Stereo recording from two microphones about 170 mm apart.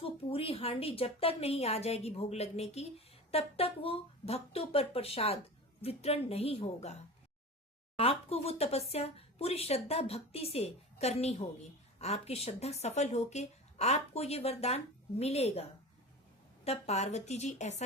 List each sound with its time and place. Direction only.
0.0 s speech: 35° left (ahead or behind)
16.6 s speech: 40° left (ahead or behind)